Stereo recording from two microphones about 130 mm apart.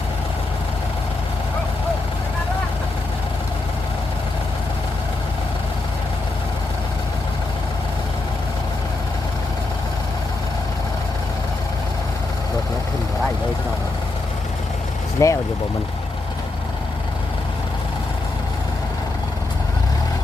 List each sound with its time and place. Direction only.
15.2 s vehicle: 25° left (ahead or behind)